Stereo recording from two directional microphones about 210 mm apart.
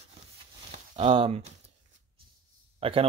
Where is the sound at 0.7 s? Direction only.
30° right (ahead or behind).